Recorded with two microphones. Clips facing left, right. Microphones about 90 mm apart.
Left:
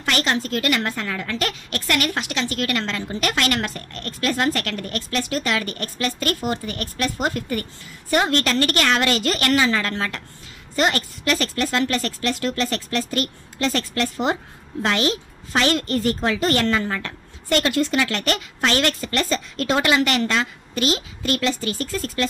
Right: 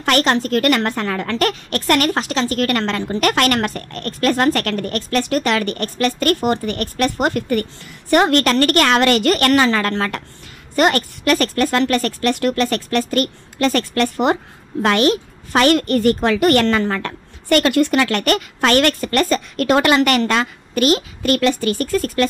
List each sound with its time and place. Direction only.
0.0 s a woman's voice: 50° right (ahead or behind)
2.8 s a woman's voice: 60° right (ahead or behind)